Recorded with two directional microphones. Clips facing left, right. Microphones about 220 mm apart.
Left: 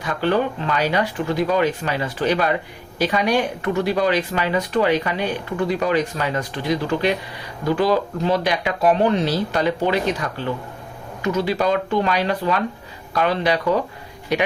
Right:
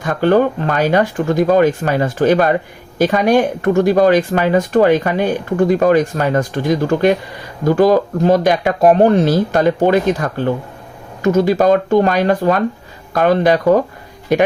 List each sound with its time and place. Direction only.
0.0 s speech: 50° right (ahead or behind)